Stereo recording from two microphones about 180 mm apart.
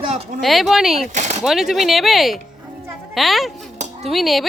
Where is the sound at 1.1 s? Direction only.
40° right (ahead or behind).